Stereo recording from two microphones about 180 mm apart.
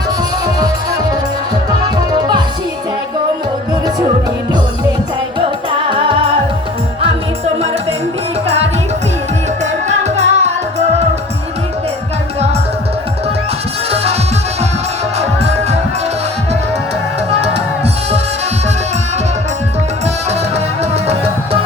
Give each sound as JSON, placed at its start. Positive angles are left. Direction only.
{"t": 10.0, "sound": "music", "side_deg": -40}
{"t": 13.9, "sound": "music", "side_deg": -35}
{"t": 15.2, "sound": "music", "side_deg": -35}
{"t": 20.9, "sound": "music", "side_deg": -35}